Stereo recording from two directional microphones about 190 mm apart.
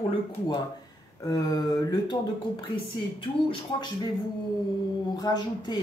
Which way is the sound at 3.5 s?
25° left (ahead or behind).